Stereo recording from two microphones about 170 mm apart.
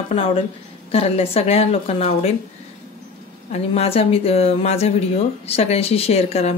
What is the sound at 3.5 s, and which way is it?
Speech, 35° left (ahead or behind).